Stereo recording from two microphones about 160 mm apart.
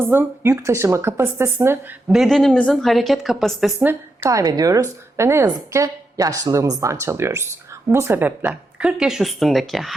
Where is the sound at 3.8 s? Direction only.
15° right (ahead or behind).